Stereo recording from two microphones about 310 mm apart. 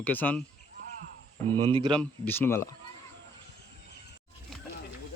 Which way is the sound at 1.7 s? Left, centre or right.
Centre.